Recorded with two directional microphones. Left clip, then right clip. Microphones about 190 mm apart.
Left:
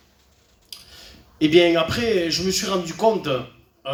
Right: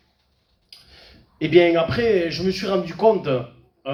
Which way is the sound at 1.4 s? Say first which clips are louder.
Even; 20° left (ahead or behind).